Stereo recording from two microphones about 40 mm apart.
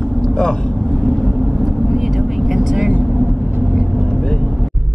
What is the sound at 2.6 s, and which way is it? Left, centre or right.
Vehicle, centre.